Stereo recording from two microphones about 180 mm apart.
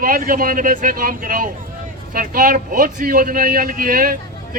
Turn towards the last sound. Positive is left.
turn(degrees=-50)  # may be behind; listen again after turning